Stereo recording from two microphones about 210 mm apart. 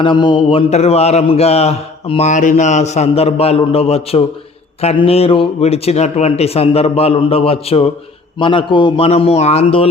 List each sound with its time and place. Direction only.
0.0 s mantra: 20° left (ahead or behind)